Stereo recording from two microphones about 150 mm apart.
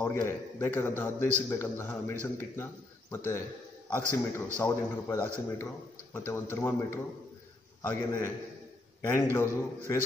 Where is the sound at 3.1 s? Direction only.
15° left (ahead or behind).